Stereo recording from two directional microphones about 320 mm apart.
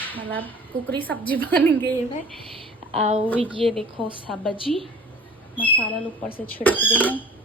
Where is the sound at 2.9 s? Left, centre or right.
Centre.